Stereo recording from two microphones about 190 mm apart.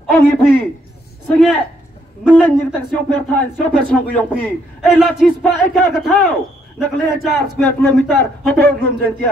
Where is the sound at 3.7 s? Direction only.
5° left (ahead or behind).